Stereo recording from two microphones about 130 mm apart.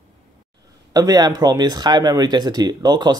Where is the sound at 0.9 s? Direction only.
30° right (ahead or behind).